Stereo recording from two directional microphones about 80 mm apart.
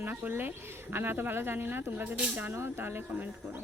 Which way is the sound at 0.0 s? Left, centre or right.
Right.